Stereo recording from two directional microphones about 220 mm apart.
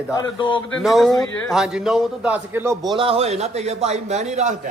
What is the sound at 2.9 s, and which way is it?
A man's voice, 25° right (ahead or behind).